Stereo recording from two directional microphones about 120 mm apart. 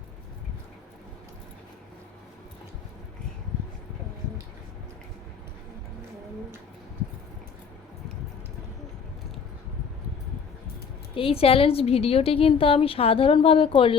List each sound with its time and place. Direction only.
11.1 s a woman's voice: 50° left (ahead or behind)